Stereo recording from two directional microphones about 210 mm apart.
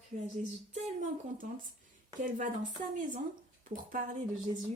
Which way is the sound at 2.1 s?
35° right (ahead or behind).